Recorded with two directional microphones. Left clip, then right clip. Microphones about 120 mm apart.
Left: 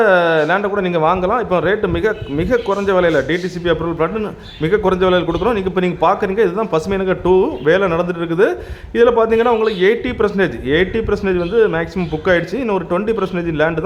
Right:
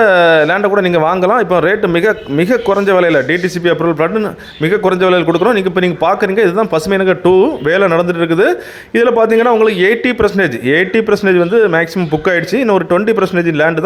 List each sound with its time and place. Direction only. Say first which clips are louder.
0.0 s a man's voice: right 5 dB; 30° right (ahead or behind)